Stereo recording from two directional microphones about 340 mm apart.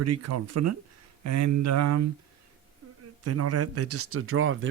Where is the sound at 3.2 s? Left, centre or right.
Right.